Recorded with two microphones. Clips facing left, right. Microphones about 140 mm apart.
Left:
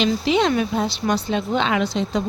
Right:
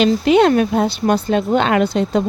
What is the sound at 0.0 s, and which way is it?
Speech, 55° right (ahead or behind).